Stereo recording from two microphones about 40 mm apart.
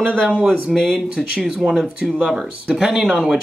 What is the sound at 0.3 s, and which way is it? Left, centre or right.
Speech, right.